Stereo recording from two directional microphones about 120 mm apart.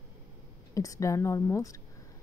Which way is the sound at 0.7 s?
25° left (ahead or behind).